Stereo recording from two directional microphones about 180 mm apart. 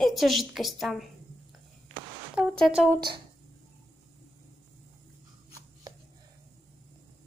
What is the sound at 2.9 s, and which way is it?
Speech, 25° right (ahead or behind).